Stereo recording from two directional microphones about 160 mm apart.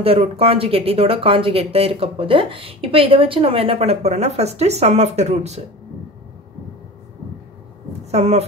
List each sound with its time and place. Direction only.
0.0 s speech: 35° right (ahead or behind)
8.1 s speech: 40° right (ahead or behind)